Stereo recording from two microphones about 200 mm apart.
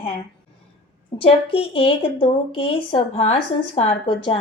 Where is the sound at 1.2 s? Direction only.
30° left (ahead or behind).